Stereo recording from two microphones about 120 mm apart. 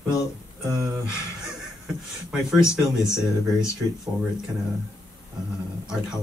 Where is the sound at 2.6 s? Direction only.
25° left (ahead or behind).